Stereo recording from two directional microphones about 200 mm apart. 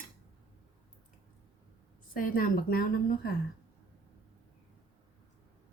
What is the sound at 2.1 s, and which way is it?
A woman's voice, 45° left (ahead or behind).